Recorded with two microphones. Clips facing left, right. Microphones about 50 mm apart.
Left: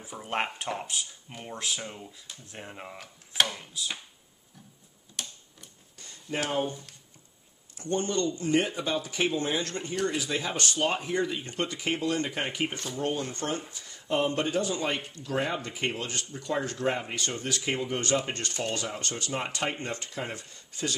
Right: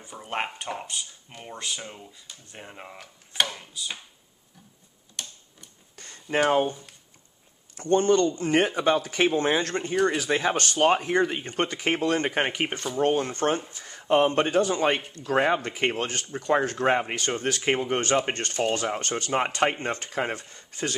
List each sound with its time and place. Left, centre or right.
0.0 s speech: centre
5.2 s tick-tock: centre
5.9 s a sound: right
6.3 s speech: right
6.7 s speech: centre
7.7 s speech: right